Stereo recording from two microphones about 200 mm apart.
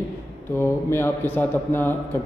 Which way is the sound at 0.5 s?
10° left (ahead or behind).